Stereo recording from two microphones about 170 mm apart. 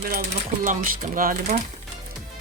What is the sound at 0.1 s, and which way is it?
Speech, 50° right (ahead or behind).